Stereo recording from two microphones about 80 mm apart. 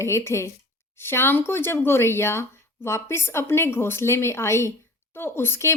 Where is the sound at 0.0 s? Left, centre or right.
Left.